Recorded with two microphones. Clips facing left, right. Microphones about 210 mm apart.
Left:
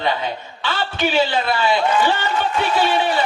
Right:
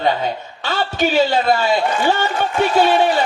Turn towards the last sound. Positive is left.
turn(degrees=-45)  # may be behind; listen again after turning